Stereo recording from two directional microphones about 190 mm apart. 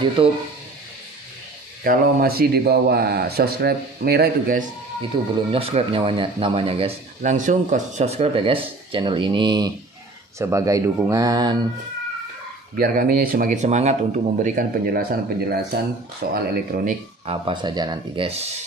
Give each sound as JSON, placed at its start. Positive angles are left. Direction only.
{"t": 0.2, "sound": "speech", "side_deg": -30}
{"t": 1.9, "sound": "speech", "side_deg": -50}
{"t": 5.5, "sound": "speech", "side_deg": -30}
{"t": 7.2, "sound": "speech", "side_deg": -40}
{"t": 12.7, "sound": "speech", "side_deg": -50}
{"t": 17.3, "sound": "speech", "side_deg": -25}